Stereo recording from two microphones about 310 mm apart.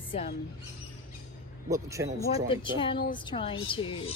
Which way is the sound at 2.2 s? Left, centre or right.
Centre.